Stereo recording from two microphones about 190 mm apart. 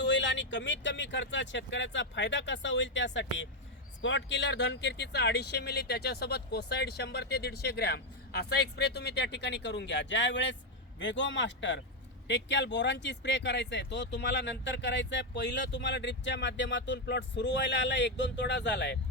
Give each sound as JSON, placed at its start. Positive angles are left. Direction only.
{"t": 0.0, "sound": "speech", "side_deg": 70}